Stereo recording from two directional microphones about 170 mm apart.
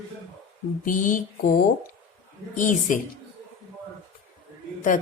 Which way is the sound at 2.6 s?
50° left (ahead or behind).